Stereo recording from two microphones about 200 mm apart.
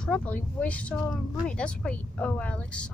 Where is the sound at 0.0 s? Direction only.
5° left (ahead or behind).